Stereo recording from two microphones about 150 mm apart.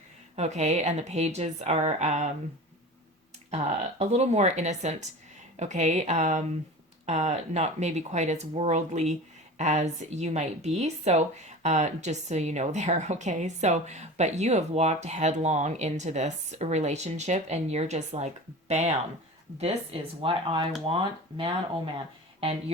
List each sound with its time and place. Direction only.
0.3 s speech: 50° right (ahead or behind)
3.5 s speech: 45° right (ahead or behind)